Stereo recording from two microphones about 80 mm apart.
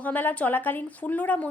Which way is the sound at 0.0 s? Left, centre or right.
Left.